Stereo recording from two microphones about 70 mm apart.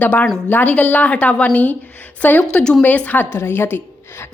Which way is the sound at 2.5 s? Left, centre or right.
Centre.